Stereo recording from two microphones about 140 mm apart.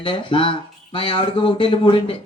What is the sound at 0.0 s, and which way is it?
Speech, 35° left (ahead or behind).